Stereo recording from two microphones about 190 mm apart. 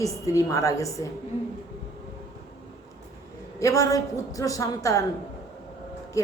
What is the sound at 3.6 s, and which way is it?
A woman's voice, 15° left (ahead or behind).